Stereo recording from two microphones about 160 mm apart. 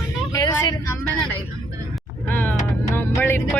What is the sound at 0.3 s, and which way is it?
Vehicle, 25° left (ahead or behind).